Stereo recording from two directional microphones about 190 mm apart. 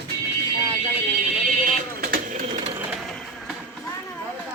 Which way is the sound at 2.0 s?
50° right (ahead or behind).